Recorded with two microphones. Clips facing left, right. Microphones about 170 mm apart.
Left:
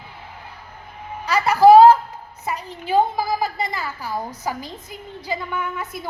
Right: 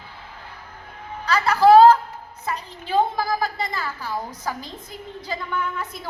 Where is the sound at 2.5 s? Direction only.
15° left (ahead or behind).